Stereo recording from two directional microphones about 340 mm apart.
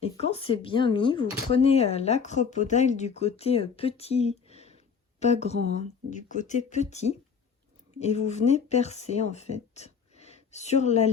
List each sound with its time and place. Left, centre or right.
0.0 s speech: centre